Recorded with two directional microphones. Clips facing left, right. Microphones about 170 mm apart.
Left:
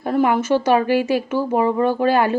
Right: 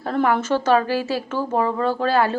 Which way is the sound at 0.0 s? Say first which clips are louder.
Left 2 dB; 15° left (ahead or behind).